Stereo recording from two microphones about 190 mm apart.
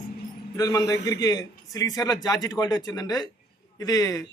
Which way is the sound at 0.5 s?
20° left (ahead or behind).